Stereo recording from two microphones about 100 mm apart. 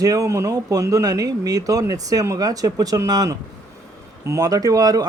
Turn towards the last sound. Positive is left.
turn(degrees=-40)  # may be behind; listen again after turning